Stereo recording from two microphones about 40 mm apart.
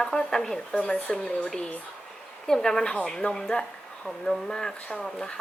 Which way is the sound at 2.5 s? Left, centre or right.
Centre.